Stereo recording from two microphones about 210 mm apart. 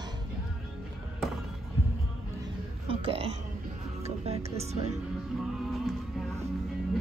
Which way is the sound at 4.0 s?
30° right (ahead or behind).